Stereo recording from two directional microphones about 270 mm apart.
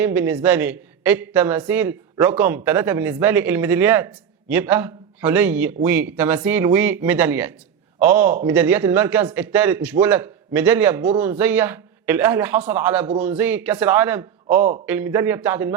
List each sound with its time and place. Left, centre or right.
0.0 s a woman's voice: centre